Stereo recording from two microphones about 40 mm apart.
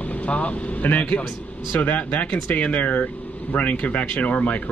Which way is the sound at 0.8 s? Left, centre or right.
Left.